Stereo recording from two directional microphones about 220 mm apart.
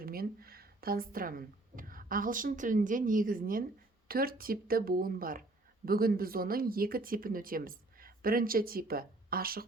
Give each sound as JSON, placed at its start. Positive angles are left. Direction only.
{"t": 0.0, "sound": "a woman's voice", "side_deg": -40}